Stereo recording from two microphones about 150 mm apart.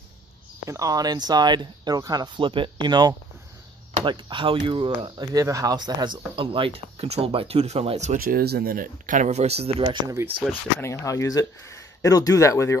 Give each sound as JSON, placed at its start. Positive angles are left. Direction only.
{"t": 0.7, "sound": "speech", "side_deg": -25}
{"t": 8.2, "sound": "speech", "side_deg": -85}
{"t": 10.8, "sound": "speech", "side_deg": 20}